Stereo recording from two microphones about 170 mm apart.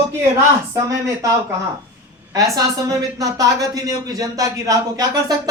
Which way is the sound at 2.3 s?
20° right (ahead or behind).